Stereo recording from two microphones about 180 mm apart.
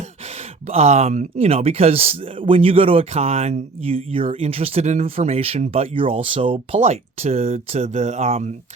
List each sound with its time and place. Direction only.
0.7 s speech: 35° right (ahead or behind)